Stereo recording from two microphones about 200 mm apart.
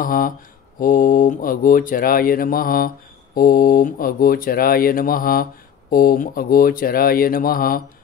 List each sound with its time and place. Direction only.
0.0 s speech: 45° left (ahead or behind)